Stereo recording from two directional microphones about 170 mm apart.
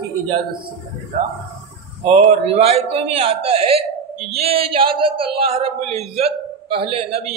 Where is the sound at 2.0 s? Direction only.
35° right (ahead or behind).